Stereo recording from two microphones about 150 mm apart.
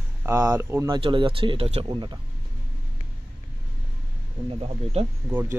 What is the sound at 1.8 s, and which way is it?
Speech, 30° right (ahead or behind).